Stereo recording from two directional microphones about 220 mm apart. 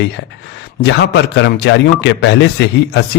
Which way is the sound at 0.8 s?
50° left (ahead or behind).